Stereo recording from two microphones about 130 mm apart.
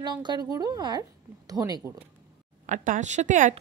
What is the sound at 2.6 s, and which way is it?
Speech, 85° right.